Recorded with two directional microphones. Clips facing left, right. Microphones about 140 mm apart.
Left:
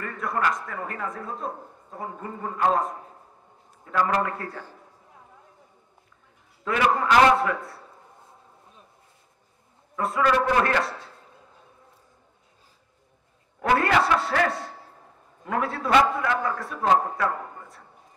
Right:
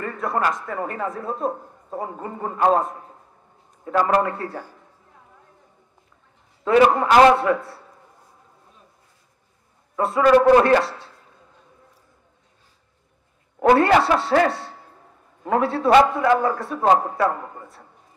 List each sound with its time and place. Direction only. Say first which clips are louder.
0.0 s a man's voice: right 3 dB; 25° right (ahead or behind)
6.6 s a man's voice: right 7 dB; 30° right (ahead or behind)
9.9 s a man's voice: right 7 dB; 25° right (ahead or behind)
13.6 s a man's voice: right 6 dB; 30° right (ahead or behind)